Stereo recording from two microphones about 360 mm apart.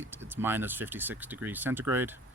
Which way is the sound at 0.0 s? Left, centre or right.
Centre.